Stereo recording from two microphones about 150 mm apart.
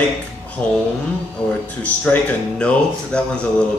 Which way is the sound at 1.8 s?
10° left (ahead or behind).